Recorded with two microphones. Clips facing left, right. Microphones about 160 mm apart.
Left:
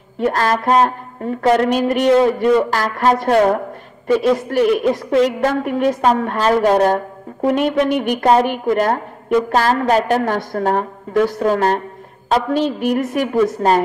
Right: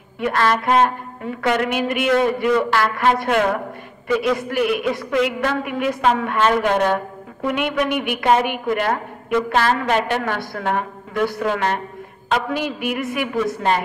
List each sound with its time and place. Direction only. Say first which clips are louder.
0.2 s a woman's voice: left 2 dB; 40° left (ahead or behind)